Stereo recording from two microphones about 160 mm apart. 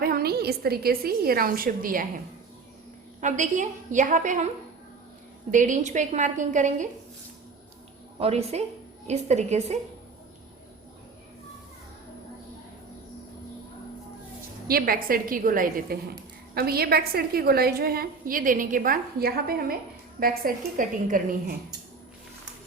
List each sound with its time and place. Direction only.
0.0 s a woman's voice: 70° right (ahead or behind); by 4.4 s 50° right (ahead or behind)
5.5 s a woman's voice: 55° right (ahead or behind)
8.2 s a woman's voice: 40° right (ahead or behind)
14.7 s a woman's voice: 65° right (ahead or behind)
16.6 s a woman's voice: 70° right (ahead or behind)